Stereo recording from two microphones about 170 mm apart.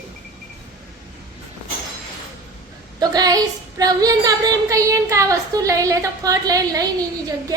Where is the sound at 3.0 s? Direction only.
25° right (ahead or behind).